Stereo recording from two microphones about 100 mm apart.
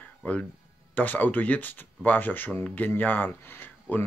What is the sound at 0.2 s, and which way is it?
Speech, 15° left (ahead or behind).